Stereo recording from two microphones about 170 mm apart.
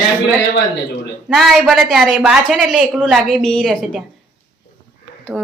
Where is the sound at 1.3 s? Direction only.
Centre (ahead or behind).